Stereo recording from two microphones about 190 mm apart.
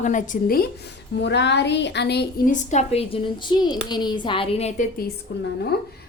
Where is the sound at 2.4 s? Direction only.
40° left (ahead or behind).